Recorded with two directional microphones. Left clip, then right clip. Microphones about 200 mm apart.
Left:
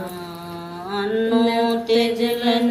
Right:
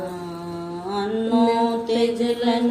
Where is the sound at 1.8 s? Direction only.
15° right (ahead or behind).